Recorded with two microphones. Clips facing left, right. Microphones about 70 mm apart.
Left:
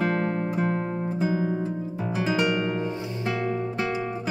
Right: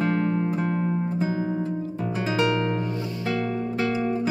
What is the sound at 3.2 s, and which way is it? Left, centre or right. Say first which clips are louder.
Music: even; left.